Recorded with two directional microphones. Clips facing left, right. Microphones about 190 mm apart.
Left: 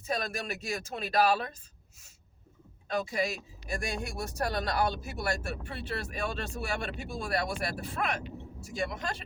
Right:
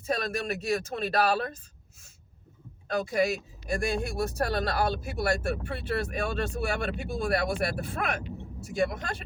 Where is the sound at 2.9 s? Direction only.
45° right (ahead or behind).